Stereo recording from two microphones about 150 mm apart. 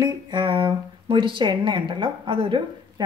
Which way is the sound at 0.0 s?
30° right (ahead or behind).